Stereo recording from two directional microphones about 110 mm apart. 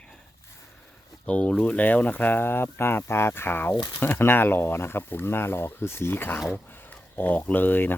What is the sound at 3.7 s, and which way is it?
Speech, 45° left (ahead or behind).